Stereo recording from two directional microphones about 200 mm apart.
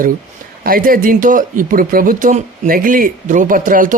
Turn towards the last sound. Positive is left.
turn(degrees=-40)  # may be behind; listen again after turning